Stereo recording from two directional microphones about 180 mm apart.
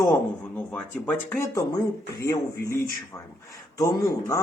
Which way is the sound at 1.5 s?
20° left (ahead or behind).